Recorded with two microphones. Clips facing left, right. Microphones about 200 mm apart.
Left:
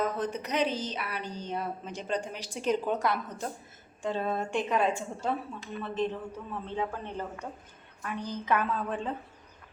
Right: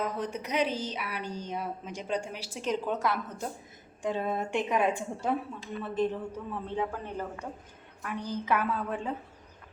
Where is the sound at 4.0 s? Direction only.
15° right (ahead or behind).